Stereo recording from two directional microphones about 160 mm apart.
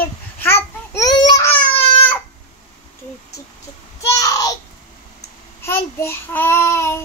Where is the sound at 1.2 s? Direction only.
25° left (ahead or behind).